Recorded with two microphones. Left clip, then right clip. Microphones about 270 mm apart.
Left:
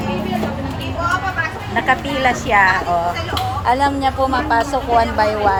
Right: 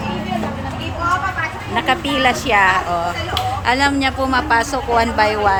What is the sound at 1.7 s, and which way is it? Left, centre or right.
Speech, centre.